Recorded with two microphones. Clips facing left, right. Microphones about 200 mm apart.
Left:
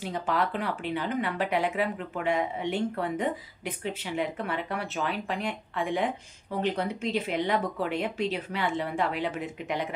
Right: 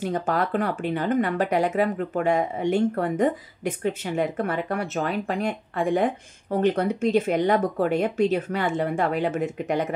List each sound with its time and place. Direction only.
0.0 s speech: 45° right (ahead or behind)